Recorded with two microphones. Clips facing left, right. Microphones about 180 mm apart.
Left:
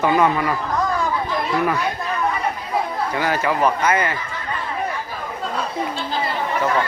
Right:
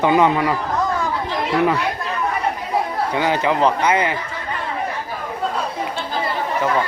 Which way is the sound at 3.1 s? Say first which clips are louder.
Right 2 dB; 20° right (ahead or behind).